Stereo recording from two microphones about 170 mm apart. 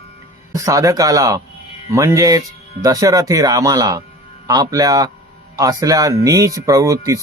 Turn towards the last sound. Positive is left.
turn(degrees=-20)  # may be behind; listen again after turning